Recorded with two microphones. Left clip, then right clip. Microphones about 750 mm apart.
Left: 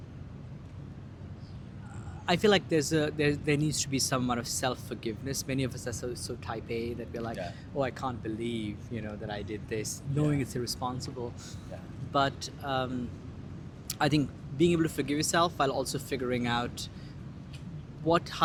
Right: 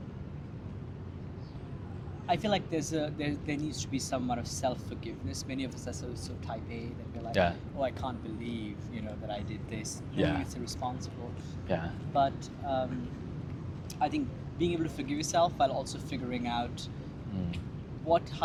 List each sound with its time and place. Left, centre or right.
2.2 s speech: left
11.7 s speech: right
12.1 s speech: left
13.8 s a sound: left
14.6 s speech: left
18.1 s speech: left